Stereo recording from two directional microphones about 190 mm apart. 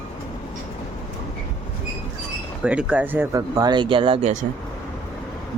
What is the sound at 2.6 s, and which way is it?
Speech, 5° right (ahead or behind).